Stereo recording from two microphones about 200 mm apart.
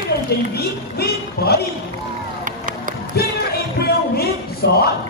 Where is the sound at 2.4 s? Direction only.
45° right (ahead or behind).